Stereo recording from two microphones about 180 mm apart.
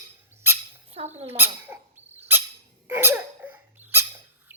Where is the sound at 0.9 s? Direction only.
35° right (ahead or behind).